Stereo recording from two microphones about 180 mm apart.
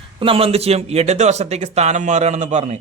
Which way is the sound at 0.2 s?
30° right (ahead or behind).